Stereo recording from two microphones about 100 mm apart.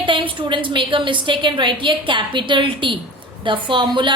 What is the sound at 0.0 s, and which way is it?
A woman's voice, 60° right (ahead or behind).